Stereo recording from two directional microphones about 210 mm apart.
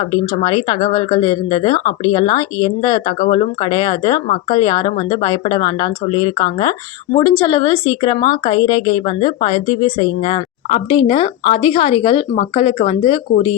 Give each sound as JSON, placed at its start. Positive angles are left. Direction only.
{"t": 0.0, "sound": "speech", "side_deg": 25}